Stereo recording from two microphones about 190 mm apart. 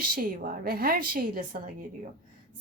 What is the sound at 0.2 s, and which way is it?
A woman's voice, 50° right (ahead or behind).